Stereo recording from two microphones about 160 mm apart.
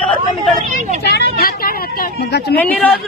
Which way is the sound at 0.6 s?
50° right (ahead or behind).